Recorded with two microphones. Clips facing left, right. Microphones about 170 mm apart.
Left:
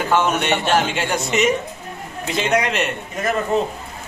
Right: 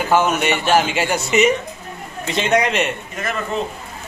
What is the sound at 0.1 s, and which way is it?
A man's voice, 5° right (ahead or behind).